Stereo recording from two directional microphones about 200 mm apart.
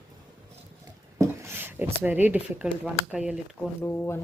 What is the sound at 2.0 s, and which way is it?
Speech, 10° right (ahead or behind).